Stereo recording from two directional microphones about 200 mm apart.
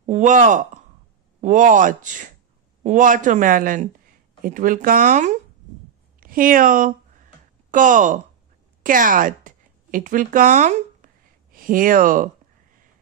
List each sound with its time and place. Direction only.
0.0 s a woman's voice: 35° right (ahead or behind)